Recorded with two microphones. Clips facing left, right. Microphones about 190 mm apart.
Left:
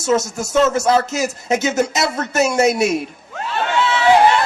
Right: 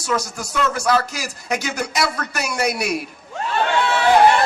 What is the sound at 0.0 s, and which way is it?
Speech, 25° left (ahead or behind).